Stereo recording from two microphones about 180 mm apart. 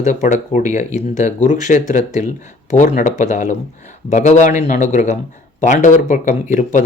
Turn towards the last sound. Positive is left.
turn(degrees=45)  # may be behind; listen again after turning